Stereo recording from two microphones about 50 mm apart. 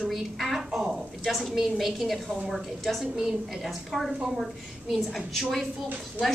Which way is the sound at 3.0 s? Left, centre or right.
Centre.